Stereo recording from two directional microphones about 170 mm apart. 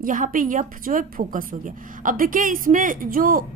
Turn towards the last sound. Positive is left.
turn(degrees=-55)  # may be behind; listen again after turning